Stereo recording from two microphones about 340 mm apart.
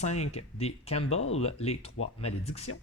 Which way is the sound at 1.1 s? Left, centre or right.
Left.